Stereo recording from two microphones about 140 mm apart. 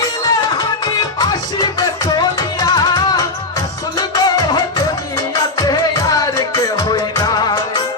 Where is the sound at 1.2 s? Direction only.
30° left (ahead or behind).